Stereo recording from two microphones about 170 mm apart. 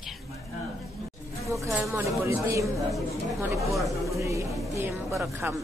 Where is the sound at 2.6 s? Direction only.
Centre (ahead or behind).